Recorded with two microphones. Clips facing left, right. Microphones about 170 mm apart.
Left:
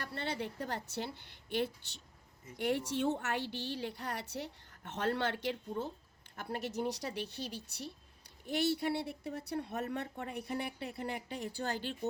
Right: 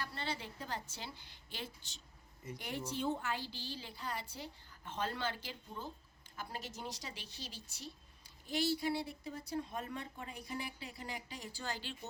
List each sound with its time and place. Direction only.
0.0 s a woman's voice: 60° left (ahead or behind)